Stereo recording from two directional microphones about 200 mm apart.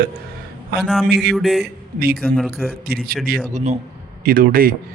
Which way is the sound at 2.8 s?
50° right (ahead or behind).